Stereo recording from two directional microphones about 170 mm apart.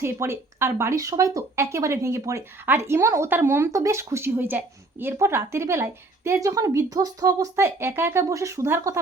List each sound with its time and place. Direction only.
0.0 s speech: 15° right (ahead or behind)